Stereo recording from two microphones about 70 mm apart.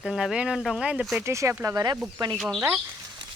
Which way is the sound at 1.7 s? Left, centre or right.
Right.